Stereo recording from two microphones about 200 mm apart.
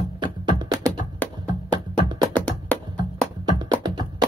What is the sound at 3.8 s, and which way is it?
Music, 20° right (ahead or behind).